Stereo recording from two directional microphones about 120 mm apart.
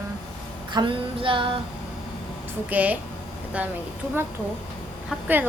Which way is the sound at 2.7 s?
10° right (ahead or behind).